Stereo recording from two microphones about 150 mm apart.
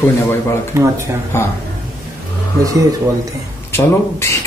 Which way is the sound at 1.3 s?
20° left (ahead or behind).